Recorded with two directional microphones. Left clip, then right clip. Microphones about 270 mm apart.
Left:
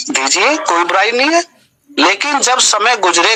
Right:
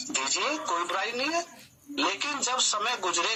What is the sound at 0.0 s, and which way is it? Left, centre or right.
A man's voice, left.